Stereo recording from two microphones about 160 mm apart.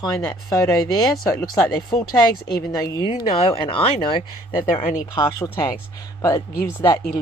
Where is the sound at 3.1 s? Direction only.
35° left (ahead or behind).